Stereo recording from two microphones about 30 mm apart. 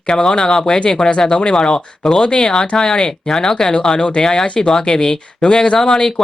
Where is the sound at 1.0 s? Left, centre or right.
Left.